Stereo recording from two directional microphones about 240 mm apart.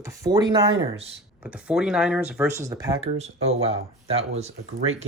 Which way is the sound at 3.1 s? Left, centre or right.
Right.